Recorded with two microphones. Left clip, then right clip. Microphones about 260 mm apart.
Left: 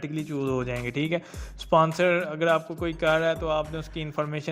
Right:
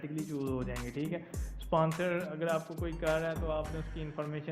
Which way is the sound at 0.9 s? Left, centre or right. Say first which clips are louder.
Left 11 dB; left.